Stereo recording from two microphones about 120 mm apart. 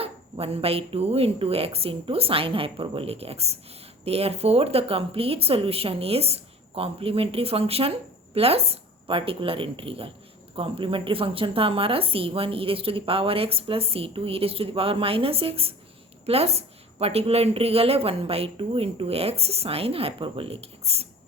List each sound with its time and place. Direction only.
0.0 s speech: 55° right (ahead or behind)